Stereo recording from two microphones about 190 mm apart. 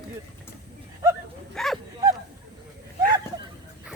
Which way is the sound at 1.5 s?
Centre (ahead or behind).